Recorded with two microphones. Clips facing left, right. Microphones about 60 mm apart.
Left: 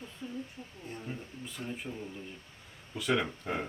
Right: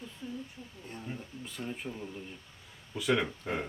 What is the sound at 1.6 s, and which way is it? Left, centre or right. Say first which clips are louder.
Speech: right 1 dB; centre.